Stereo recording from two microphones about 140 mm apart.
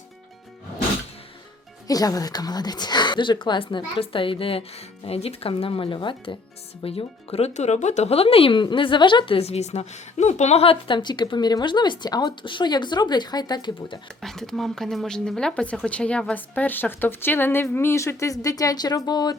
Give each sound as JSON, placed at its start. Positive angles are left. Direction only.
{"t": 1.9, "sound": "speech", "side_deg": 25}
{"t": 14.2, "sound": "speech", "side_deg": 5}